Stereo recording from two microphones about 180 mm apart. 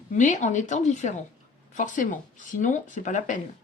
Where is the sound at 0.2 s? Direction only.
45° left (ahead or behind).